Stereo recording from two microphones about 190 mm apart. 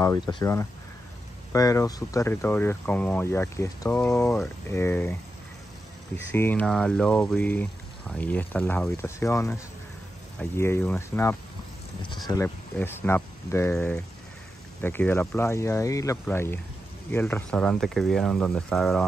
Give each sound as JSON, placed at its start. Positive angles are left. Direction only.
{"t": 0.0, "sound": "speech", "side_deg": 15}
{"t": 6.3, "sound": "speech", "side_deg": 10}
{"t": 12.7, "sound": "speech", "side_deg": 10}